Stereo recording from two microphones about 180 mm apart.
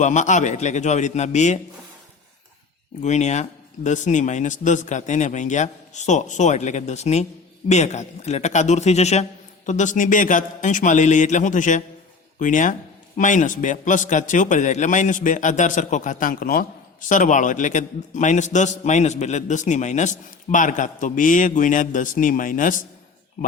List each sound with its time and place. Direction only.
0.0 s a man's voice: 40° left (ahead or behind)
3.0 s a man's voice: 40° left (ahead or behind)